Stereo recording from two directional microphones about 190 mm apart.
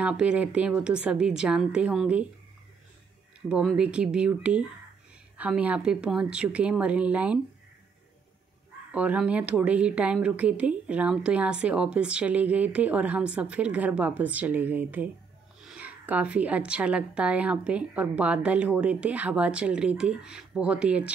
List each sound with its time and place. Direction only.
0.0 s a woman's voice: 5° right (ahead or behind)
3.4 s a woman's voice: 5° right (ahead or behind)
8.9 s speech: 5° right (ahead or behind)